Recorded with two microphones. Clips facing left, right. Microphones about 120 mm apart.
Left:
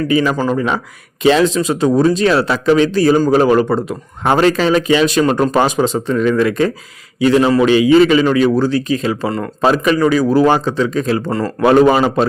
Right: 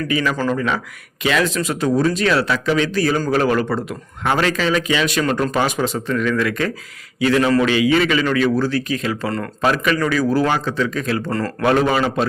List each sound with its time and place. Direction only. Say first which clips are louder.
0.1 s speech: left 4 dB; 30° left (ahead or behind)
11.3 s speech: left 5 dB; 15° left (ahead or behind); by 12.2 s 35° left (ahead or behind)